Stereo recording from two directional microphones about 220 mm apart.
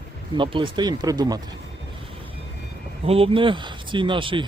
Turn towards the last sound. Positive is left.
turn(degrees=-20)  # may be behind; listen again after turning